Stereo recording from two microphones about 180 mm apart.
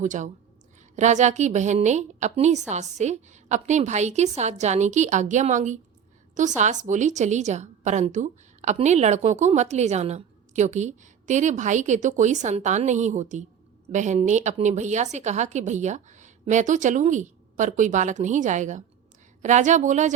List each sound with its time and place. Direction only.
0.0 s a woman's voice: 45° right (ahead or behind)